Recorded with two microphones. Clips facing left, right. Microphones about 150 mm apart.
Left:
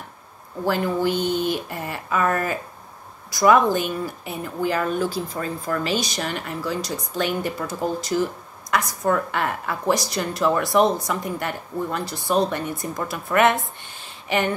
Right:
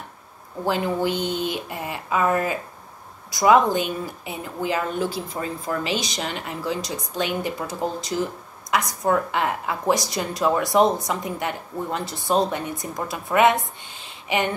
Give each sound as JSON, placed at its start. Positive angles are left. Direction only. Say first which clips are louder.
{"t": 0.7, "sound": "speech", "louder": "left 1 dB", "side_deg": -20}